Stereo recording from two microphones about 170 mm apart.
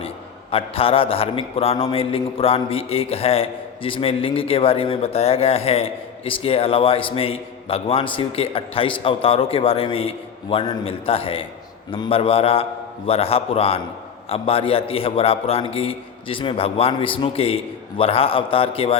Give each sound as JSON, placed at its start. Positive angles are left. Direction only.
{"t": 0.5, "sound": "a man's voice", "side_deg": 35}